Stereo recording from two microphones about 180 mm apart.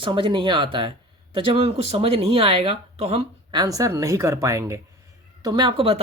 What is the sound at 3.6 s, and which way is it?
Speech, 20° right (ahead or behind).